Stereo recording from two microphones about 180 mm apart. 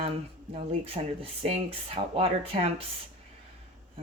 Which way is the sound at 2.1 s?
35° right (ahead or behind).